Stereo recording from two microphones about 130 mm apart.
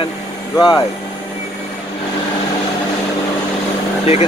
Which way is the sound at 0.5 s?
30° left (ahead or behind).